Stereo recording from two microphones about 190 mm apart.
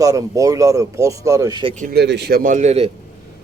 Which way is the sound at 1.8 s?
55° right (ahead or behind).